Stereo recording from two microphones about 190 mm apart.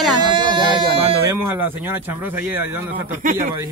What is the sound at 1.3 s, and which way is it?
Speech, 10° right (ahead or behind).